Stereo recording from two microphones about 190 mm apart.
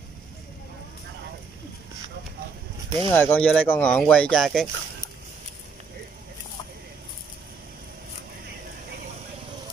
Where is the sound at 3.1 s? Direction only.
10° left (ahead or behind).